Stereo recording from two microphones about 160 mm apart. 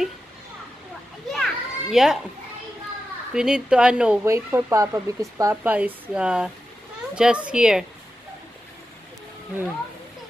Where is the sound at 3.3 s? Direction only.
5° right (ahead or behind).